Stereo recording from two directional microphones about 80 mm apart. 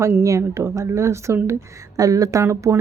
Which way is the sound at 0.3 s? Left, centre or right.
Right.